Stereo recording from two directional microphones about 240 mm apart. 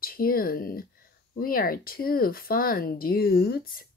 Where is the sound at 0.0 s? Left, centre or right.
Left.